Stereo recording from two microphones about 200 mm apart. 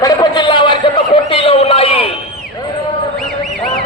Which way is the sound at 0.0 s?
20° left (ahead or behind).